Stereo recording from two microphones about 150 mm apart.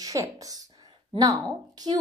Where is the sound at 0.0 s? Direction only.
20° right (ahead or behind).